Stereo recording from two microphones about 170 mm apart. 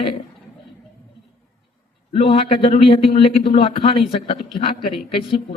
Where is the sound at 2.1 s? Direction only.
30° left (ahead or behind).